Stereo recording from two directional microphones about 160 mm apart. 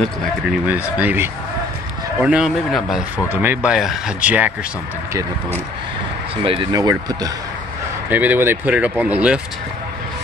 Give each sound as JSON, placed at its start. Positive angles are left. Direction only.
{"t": 0.7, "sound": "speech", "side_deg": -10}
{"t": 6.3, "sound": "speech", "side_deg": -35}
{"t": 6.7, "sound": "speech", "side_deg": -20}
{"t": 8.1, "sound": "speech", "side_deg": -10}